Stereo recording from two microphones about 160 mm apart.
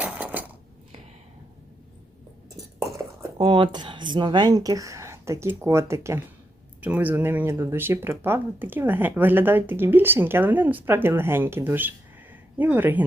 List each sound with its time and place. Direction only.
0.0 s dishes: 10° right (ahead or behind)
3.3 s speech: 30° right (ahead or behind); by 13.1 s 10° right (ahead or behind)